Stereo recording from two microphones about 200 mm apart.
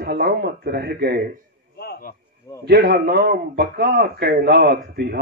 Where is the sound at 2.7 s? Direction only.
55° right (ahead or behind).